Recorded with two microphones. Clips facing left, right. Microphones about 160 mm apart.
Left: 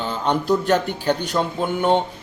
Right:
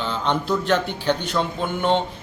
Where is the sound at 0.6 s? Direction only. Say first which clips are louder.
Left 2 dB; 45° left (ahead or behind).